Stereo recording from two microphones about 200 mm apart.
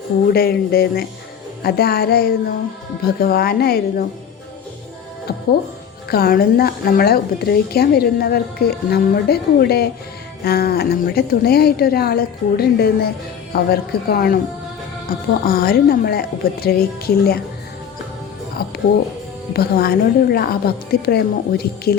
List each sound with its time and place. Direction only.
0.3 s a woman's voice: 50° left (ahead or behind)
6.1 s a woman's voice: 50° left (ahead or behind)
19.5 s a woman's voice: 50° left (ahead or behind)